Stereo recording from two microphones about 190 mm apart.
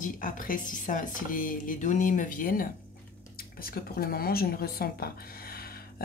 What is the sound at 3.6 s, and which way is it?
Speech, 50° left (ahead or behind).